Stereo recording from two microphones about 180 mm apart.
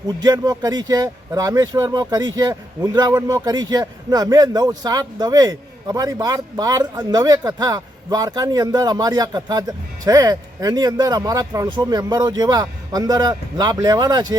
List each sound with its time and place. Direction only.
0.2 s speech: 20° right (ahead or behind)